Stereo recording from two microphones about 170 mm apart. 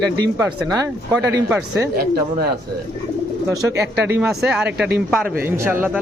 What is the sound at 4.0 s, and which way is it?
Speech, 5° right (ahead or behind).